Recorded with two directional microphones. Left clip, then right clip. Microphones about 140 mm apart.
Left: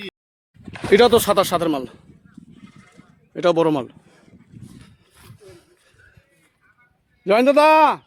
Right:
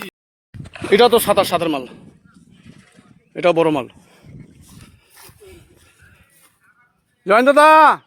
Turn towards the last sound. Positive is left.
turn(degrees=10)  # may be behind; listen again after turning